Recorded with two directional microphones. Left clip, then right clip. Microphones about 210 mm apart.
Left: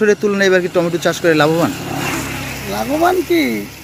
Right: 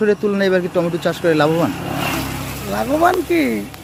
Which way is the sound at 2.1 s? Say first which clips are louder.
Left 1 dB; 55° right (ahead or behind).